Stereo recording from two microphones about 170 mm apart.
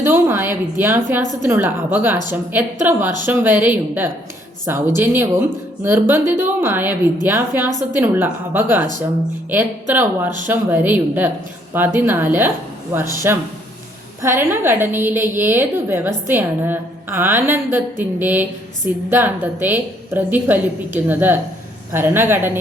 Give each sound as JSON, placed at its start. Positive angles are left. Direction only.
{"t": 0.0, "sound": "a woman's voice", "side_deg": -15}
{"t": 14.2, "sound": "a woman's voice", "side_deg": -15}